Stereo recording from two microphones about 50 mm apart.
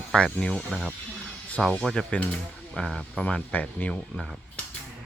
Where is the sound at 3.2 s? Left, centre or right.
Left.